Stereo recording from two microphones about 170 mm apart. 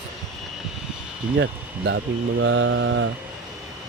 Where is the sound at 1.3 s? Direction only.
90° right.